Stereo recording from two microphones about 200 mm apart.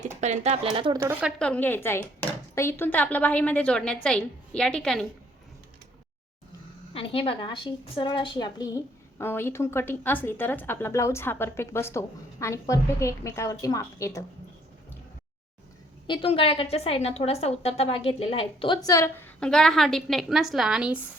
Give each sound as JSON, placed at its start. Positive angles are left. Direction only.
{"t": 0.2, "sound": "speech", "side_deg": -35}
{"t": 0.9, "sound": "speech", "side_deg": -10}
{"t": 1.4, "sound": "a woman's voice", "side_deg": 5}
{"t": 6.9, "sound": "a woman's voice", "side_deg": 30}
{"t": 16.0, "sound": "a woman's voice", "side_deg": 25}